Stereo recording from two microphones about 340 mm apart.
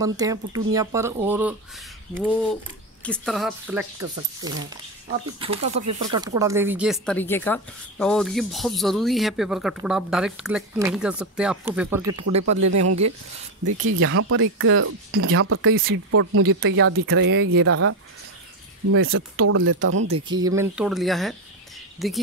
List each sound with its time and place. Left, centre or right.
0.0 s a woman's voice: centre
5.4 s a woman's voice: centre
12.1 s speech: right
13.8 s speech: right
20.2 s a woman's voice: centre